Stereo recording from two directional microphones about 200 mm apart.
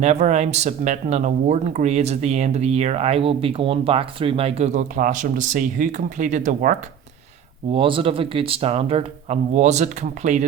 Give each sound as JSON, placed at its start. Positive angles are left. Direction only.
{"t": 0.0, "sound": "speech", "side_deg": -35}
{"t": 7.7, "sound": "speech", "side_deg": -25}